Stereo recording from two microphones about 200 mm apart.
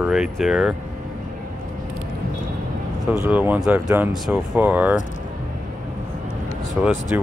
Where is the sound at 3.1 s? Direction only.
10° right (ahead or behind).